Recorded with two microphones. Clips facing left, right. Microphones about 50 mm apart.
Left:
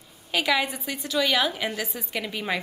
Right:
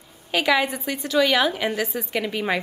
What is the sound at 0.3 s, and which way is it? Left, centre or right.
A woman's voice, centre.